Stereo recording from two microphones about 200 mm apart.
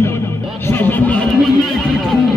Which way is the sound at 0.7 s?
10° left (ahead or behind).